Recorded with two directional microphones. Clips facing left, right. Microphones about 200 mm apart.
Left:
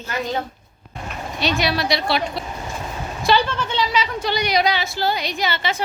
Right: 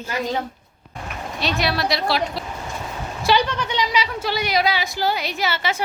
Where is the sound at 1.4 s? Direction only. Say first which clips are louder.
Left 1 dB; centre (ahead or behind).